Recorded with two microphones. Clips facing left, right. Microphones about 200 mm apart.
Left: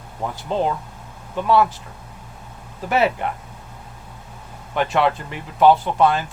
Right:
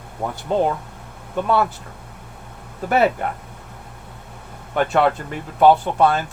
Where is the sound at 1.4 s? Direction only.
50° right (ahead or behind).